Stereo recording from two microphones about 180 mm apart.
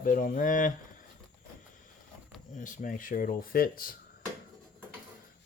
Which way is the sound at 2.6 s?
45° left (ahead or behind).